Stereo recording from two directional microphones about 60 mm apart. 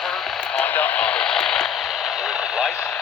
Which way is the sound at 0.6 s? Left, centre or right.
Left.